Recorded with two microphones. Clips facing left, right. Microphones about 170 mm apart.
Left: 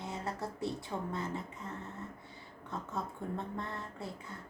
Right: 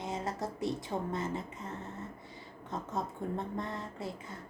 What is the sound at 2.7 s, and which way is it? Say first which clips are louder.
A woman's voice: right 3 dB; 20° right (ahead or behind).